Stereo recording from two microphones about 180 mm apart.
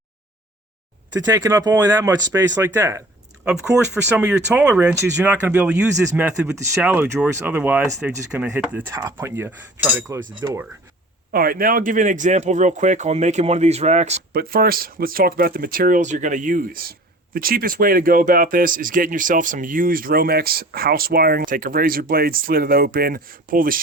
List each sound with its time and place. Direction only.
1.2 s speech: 15° right (ahead or behind)
3.4 s speech: 5° right (ahead or behind)
11.3 s speech: 55° right (ahead or behind); by 14.2 s 40° right (ahead or behind)
14.3 s speech: 55° right (ahead or behind)